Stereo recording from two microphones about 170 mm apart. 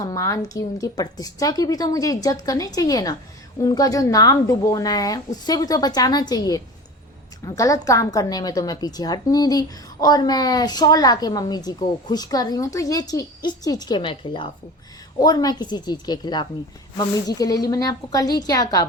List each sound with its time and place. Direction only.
0.0 s a woman's voice: 20° left (ahead or behind)